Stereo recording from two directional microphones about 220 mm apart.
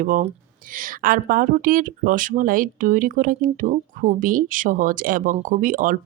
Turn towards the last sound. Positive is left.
turn(degrees=-35)  # may be behind; listen again after turning